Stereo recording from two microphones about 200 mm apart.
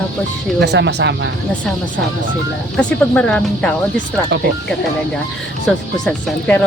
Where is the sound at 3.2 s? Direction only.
5° left (ahead or behind).